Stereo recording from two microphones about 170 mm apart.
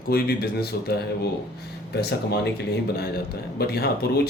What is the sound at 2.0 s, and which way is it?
Speech, 80° left.